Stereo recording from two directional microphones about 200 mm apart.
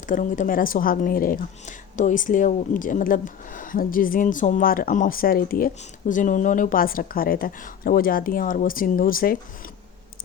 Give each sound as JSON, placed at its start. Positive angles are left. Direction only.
{"t": 0.1, "sound": "a woman's voice", "side_deg": 40}